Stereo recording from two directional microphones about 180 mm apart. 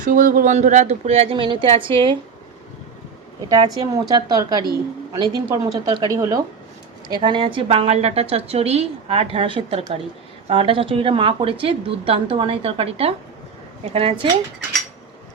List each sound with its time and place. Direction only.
0.0 s a woman's voice: 45° right (ahead or behind); by 2.1 s 30° right (ahead or behind)
3.8 s a woman's voice: 20° right (ahead or behind)